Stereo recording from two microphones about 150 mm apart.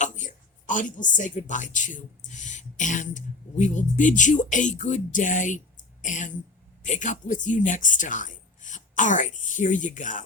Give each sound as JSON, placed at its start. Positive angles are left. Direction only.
{"t": 0.0, "sound": "a woman's voice", "side_deg": 55}